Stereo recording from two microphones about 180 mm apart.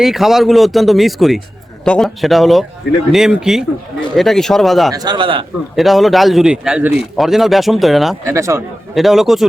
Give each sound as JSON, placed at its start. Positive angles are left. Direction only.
{"t": 0.0, "sound": "a man's voice", "side_deg": 0}
{"t": 4.9, "sound": "a man's voice", "side_deg": -25}
{"t": 5.7, "sound": "a man's voice", "side_deg": 0}
{"t": 8.3, "sound": "speech", "side_deg": -15}
{"t": 9.0, "sound": "a man's voice", "side_deg": 0}